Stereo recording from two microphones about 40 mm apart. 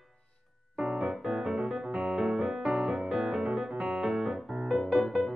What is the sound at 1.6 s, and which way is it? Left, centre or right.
Music, right.